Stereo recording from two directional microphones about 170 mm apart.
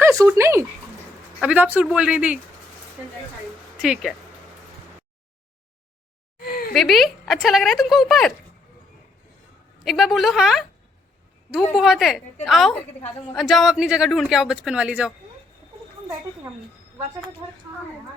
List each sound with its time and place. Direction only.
0.0 s speech: 15° right (ahead or behind)
3.8 s speech: 5° right (ahead or behind)
6.4 s a sound: 60° left (ahead or behind)
6.7 s speech: centre (ahead or behind)
9.8 s speech: centre (ahead or behind)